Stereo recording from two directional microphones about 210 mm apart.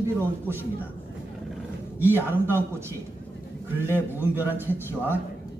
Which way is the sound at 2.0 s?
10° right (ahead or behind).